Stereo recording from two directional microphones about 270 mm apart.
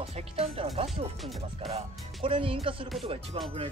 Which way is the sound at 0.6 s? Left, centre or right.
Centre.